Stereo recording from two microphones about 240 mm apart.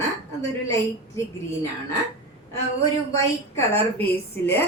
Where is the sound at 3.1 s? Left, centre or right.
Centre.